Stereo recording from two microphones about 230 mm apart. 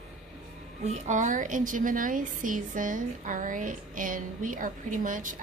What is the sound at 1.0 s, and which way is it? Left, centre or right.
A woman's voice, right.